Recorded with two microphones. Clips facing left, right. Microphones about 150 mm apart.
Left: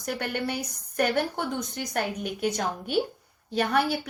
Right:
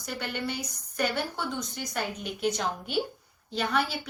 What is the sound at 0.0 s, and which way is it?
A woman's voice, 55° left (ahead or behind).